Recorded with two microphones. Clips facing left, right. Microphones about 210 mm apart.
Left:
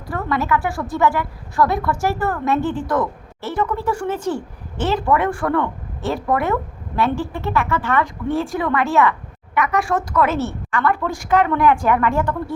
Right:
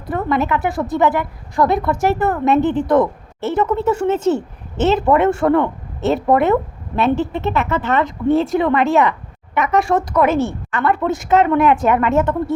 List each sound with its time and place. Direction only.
0.1 s a woman's voice: 20° right (ahead or behind)